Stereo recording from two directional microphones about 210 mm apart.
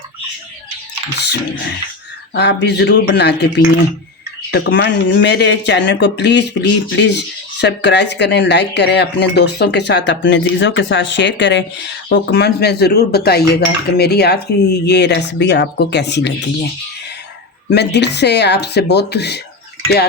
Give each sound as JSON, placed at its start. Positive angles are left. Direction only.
{"t": 2.3, "sound": "speech", "side_deg": 55}
{"t": 4.5, "sound": "speech", "side_deg": 55}
{"t": 17.7, "sound": "speech", "side_deg": 55}